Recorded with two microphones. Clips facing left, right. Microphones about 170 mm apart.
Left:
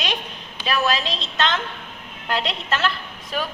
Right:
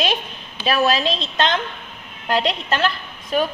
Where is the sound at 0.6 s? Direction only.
25° right (ahead or behind).